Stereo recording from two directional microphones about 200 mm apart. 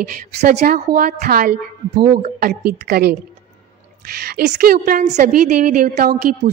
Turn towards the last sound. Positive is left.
turn(degrees=-40)  # may be behind; listen again after turning